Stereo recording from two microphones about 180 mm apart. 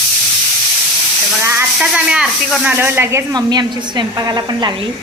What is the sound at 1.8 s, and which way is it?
Speech, 5° right (ahead or behind).